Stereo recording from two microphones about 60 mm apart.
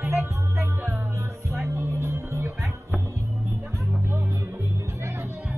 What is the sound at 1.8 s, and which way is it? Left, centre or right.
Music, right.